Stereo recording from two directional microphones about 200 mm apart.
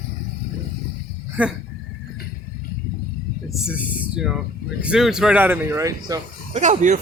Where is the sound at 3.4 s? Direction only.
Centre (ahead or behind).